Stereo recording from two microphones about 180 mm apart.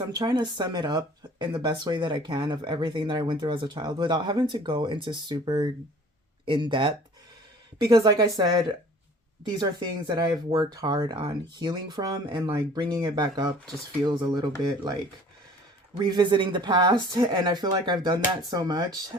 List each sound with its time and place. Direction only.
0.1 s speech: 20° right (ahead or behind)
16.0 s speech: 25° right (ahead or behind)